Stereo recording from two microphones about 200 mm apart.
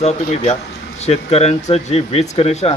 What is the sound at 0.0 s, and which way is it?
A man's voice, 35° left (ahead or behind).